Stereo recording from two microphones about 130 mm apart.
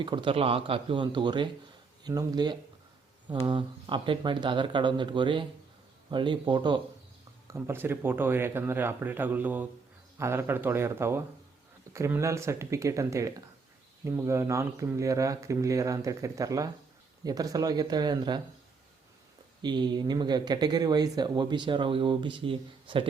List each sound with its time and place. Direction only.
0.0 s speech: 40° right (ahead or behind)
7.4 s speech: 20° right (ahead or behind)
19.6 s speech: 35° right (ahead or behind)